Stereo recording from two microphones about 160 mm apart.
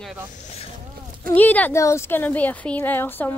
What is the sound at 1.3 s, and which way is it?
Speech, 10° left (ahead or behind).